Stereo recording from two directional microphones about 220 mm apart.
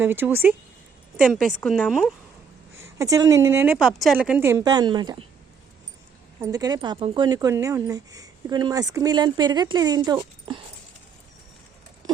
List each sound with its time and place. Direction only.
0.0 s a woman's voice: 10° right (ahead or behind)
2.8 s speech: 15° right (ahead or behind)
6.4 s speech: 15° right (ahead or behind)